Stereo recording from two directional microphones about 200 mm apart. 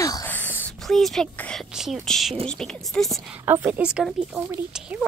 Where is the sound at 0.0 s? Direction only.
10° left (ahead or behind).